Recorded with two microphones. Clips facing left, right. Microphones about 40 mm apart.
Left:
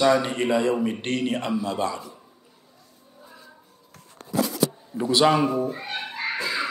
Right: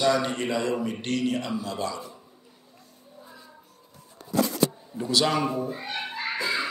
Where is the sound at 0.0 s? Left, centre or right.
Left.